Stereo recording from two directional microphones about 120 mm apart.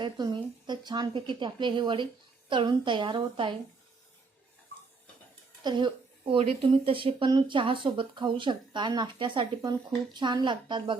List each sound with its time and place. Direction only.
0.0 s a woman's voice: 35° right (ahead or behind)
5.6 s a woman's voice: 40° right (ahead or behind)
7.3 s speech: 35° right (ahead or behind)